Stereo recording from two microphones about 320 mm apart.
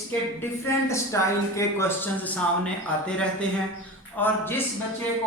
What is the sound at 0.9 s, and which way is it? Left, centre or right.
Speech, centre.